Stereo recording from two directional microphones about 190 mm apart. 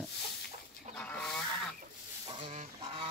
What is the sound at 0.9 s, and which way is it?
Goose, 5° left (ahead or behind).